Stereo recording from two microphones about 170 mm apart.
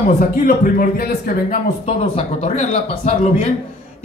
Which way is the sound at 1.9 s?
40° left (ahead or behind).